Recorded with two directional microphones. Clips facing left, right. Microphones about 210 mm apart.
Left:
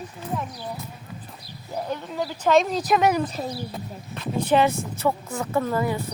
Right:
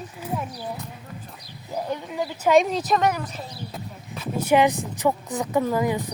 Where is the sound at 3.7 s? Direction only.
5° right (ahead or behind).